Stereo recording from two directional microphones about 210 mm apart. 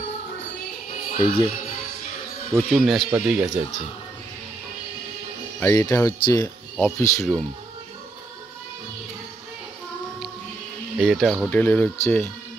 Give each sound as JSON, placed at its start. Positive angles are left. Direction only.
{"t": 1.2, "sound": "speech", "side_deg": 25}
{"t": 2.5, "sound": "speech", "side_deg": 0}
{"t": 5.6, "sound": "speech", "side_deg": 15}
{"t": 11.0, "sound": "speech", "side_deg": 0}